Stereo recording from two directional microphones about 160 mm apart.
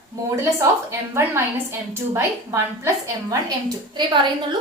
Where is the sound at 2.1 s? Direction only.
20° right (ahead or behind).